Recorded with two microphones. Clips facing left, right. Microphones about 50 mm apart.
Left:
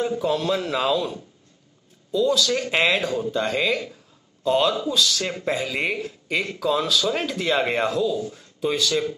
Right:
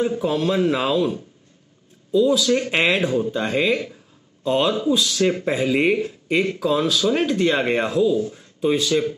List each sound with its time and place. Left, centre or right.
0.0 s speech: centre